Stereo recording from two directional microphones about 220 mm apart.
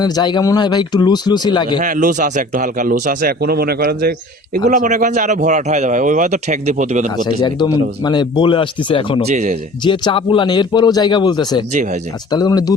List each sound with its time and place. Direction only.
0.0 s speech: 20° left (ahead or behind)
1.8 s a man's voice: 35° right (ahead or behind)
7.4 s speech: 20° left (ahead or behind)
9.2 s a man's voice: 30° right (ahead or behind)
9.8 s speech: 20° left (ahead or behind)
11.7 s a man's voice: 35° right (ahead or behind)
12.3 s speech: 20° left (ahead or behind)